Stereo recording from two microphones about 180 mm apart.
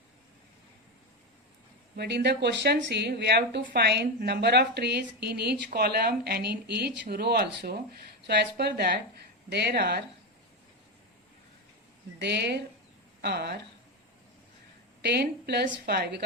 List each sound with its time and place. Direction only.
2.0 s a woman's voice: 65° right (ahead or behind)
12.2 s speech: 65° right (ahead or behind)
15.0 s a woman's voice: 65° right (ahead or behind)